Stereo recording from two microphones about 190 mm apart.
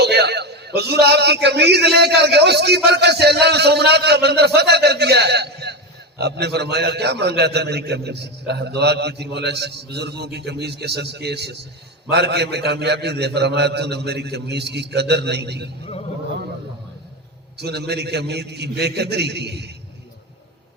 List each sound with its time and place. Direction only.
0.0 s a man's voice: 60° right (ahead or behind)
17.6 s a man's voice: 60° right (ahead or behind)